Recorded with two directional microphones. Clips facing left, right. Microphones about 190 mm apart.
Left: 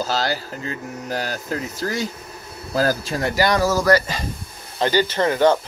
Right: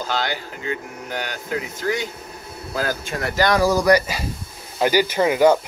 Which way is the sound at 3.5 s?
15° right (ahead or behind).